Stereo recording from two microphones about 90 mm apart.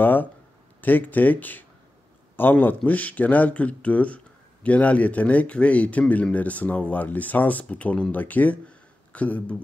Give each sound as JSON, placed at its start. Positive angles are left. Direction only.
{"t": 0.0, "sound": "speech", "side_deg": 20}